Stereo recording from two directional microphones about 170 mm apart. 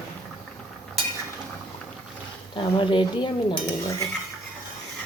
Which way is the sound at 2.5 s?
30° left (ahead or behind).